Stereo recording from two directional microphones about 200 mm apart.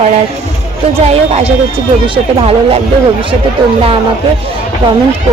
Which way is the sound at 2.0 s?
30° right (ahead or behind).